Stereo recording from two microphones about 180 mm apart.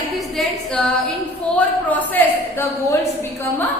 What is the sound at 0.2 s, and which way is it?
Female singing, centre (ahead or behind).